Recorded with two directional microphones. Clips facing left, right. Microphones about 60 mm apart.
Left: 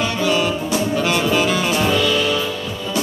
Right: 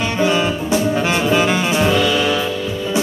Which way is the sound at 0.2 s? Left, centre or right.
Right.